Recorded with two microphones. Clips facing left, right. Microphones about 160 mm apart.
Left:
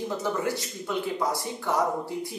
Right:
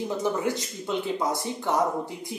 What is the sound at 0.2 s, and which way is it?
Speech, 20° right (ahead or behind).